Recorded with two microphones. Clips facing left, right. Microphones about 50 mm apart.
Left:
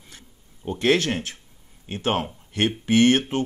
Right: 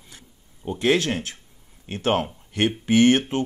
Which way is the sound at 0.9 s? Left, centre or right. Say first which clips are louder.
Even; left.